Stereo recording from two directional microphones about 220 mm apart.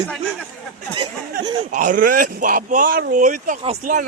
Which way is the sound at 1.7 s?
35° right (ahead or behind).